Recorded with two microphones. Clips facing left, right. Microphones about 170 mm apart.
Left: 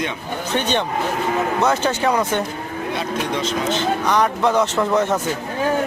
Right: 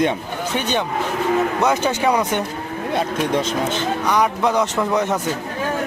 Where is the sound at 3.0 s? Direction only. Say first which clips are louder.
Right 4 dB; 50° right (ahead or behind).